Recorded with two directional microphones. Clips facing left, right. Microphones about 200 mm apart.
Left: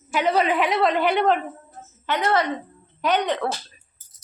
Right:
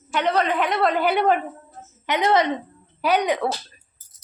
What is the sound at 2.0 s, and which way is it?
A woman's voice, 15° right (ahead or behind).